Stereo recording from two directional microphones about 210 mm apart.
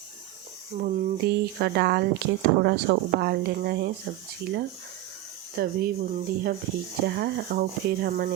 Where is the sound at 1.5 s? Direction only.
50° right (ahead or behind).